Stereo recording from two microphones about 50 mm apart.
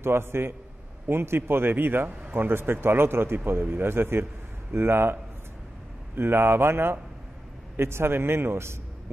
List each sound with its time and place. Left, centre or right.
0.0 s a man's voice: right